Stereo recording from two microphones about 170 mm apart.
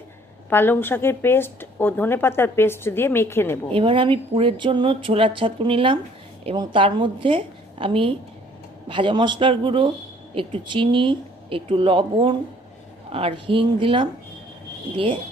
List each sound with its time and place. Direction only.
0.5 s speech: 10° left (ahead or behind)
3.7 s speech: 30° right (ahead or behind)